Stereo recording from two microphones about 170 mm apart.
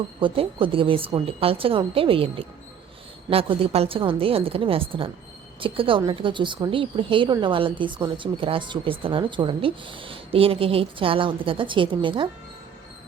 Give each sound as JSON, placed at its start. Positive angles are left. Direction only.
{"t": 0.2, "sound": "speech", "side_deg": -30}